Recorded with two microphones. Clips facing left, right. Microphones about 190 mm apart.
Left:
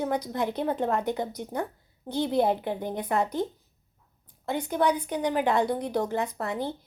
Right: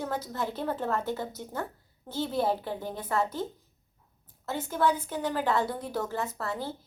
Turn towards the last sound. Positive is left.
turn(degrees=20)  # may be behind; listen again after turning